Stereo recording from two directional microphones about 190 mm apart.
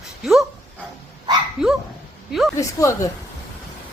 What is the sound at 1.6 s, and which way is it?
Dog, centre (ahead or behind).